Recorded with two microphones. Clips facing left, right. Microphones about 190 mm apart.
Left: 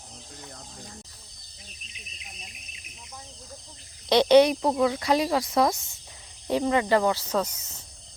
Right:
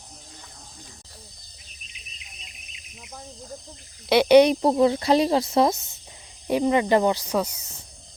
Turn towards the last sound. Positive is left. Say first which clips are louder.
# right 2 dB
turn(degrees=-10)  # may be behind; listen again after turning